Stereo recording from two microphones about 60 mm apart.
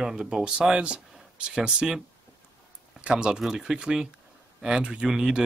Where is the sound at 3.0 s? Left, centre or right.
Centre.